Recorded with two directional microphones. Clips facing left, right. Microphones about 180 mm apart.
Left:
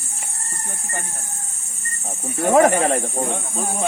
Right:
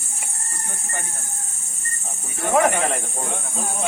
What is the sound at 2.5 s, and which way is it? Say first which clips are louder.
Speech: left 4 dB; 40° left (ahead or behind).